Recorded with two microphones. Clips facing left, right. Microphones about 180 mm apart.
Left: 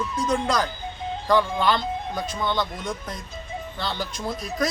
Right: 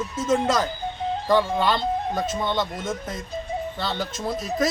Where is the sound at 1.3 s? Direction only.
25° right (ahead or behind).